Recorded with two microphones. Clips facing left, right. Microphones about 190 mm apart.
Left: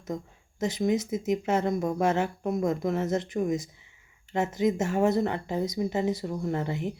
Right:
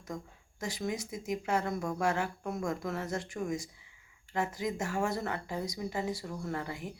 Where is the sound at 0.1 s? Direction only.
20° left (ahead or behind).